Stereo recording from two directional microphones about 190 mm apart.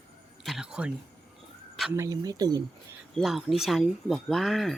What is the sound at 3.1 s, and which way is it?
Speech, centre (ahead or behind).